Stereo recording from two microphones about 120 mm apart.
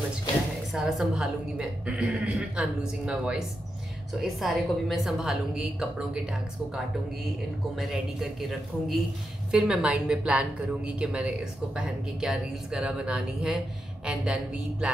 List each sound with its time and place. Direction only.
0.7 s a woman's voice: 5° right (ahead or behind)
7.7 s a woman's voice: 5° right (ahead or behind)